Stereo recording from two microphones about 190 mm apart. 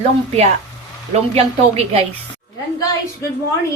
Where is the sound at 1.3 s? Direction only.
35° right (ahead or behind).